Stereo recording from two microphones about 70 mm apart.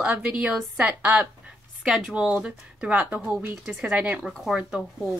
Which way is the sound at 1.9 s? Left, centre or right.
Centre.